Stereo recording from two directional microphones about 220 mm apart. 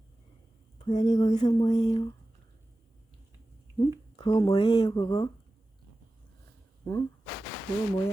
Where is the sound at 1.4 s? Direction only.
20° left (ahead or behind).